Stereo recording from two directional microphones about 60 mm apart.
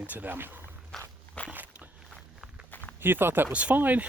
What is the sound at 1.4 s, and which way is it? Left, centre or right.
Walk, left.